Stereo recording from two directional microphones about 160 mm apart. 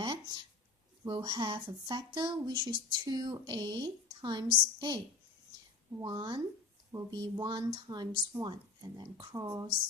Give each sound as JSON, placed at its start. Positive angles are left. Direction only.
{"t": 0.0, "sound": "a sound", "side_deg": -25}
{"t": 1.0, "sound": "speech", "side_deg": -30}
{"t": 6.0, "sound": "speech", "side_deg": -25}